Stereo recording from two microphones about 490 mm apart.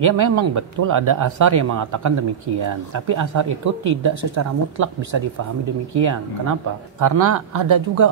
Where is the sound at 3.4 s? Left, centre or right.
Right.